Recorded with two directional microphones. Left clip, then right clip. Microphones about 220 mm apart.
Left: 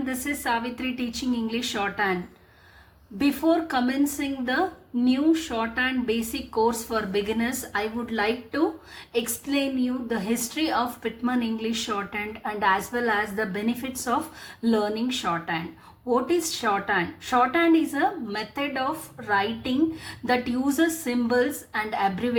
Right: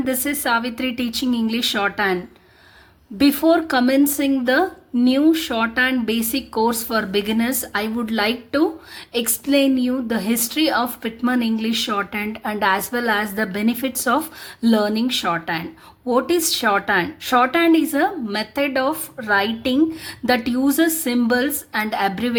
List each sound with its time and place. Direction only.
0.0 s speech: 40° right (ahead or behind)
3.2 s a woman's voice: 40° right (ahead or behind)